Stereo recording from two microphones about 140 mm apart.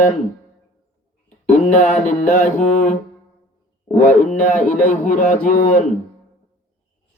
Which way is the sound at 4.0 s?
60° left (ahead or behind).